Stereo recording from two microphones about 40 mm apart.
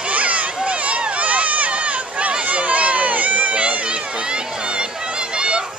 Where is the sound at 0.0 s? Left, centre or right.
Right.